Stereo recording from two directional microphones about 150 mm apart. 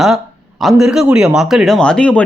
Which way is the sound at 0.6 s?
Centre (ahead or behind).